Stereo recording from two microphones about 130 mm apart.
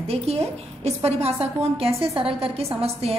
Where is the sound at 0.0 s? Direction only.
50° right (ahead or behind).